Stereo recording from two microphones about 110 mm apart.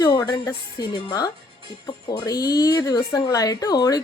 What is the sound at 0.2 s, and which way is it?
Speech, 30° left (ahead or behind).